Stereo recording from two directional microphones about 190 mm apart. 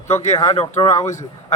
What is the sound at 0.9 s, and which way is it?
Speech, 15° left (ahead or behind).